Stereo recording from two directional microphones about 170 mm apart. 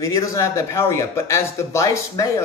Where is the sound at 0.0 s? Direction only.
15° left (ahead or behind).